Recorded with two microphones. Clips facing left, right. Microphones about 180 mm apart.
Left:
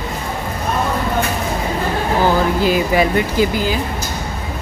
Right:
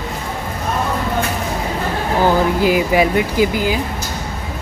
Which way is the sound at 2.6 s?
15° right (ahead or behind).